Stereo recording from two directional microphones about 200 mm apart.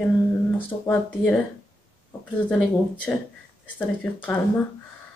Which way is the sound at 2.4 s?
5° left (ahead or behind).